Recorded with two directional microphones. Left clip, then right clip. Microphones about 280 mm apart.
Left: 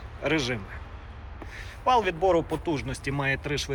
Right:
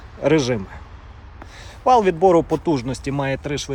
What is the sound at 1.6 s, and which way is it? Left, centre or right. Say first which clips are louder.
Speech: right 8 dB; centre.